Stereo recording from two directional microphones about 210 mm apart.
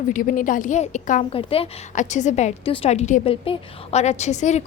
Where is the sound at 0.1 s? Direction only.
40° left (ahead or behind).